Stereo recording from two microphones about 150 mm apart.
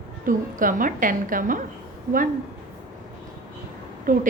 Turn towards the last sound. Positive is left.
turn(degrees=-65)  # may be behind; listen again after turning